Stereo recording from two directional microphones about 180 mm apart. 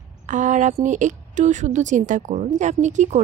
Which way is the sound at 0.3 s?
45° right (ahead or behind).